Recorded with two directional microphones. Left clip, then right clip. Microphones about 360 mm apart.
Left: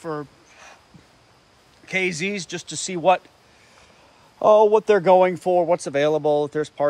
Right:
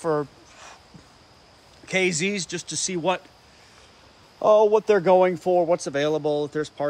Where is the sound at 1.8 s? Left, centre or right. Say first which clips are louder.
Even; centre.